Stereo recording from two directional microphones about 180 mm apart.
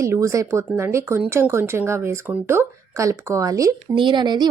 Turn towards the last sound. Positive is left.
turn(degrees=-25)  # may be behind; listen again after turning